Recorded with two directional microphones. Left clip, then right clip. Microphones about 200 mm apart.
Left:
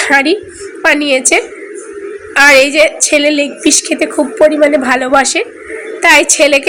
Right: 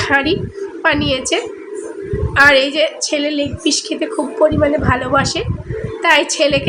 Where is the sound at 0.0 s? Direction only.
15° left (ahead or behind).